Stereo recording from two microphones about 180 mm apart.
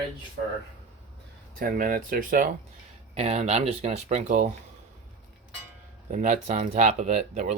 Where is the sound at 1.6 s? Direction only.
50° right (ahead or behind).